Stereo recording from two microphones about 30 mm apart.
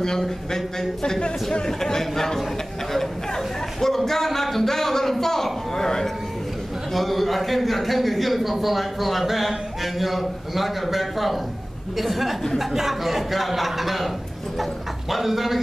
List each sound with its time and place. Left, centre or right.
0.5 s speech: centre
2.9 s a sound: centre
6.9 s speech: centre